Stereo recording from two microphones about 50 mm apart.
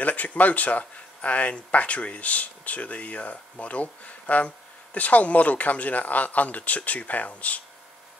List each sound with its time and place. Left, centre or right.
0.0 s speech: left